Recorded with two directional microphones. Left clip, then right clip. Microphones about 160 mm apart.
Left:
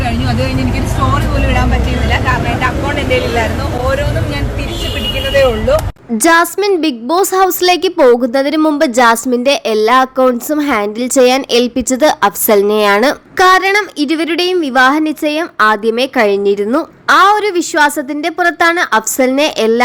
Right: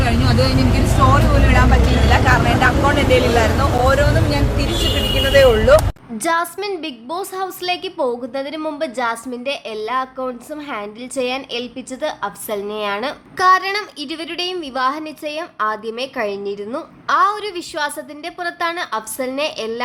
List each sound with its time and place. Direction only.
0.0 s vehicle: centre (ahead or behind)
4.0 s a sound: centre (ahead or behind)
6.1 s a woman's voice: 35° left (ahead or behind)
13.3 s a woman's voice: 35° left (ahead or behind)